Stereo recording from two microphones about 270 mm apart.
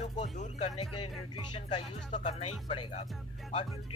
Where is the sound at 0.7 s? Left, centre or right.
Left.